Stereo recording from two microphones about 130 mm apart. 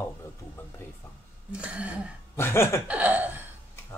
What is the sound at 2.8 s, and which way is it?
Speech, 10° right (ahead or behind).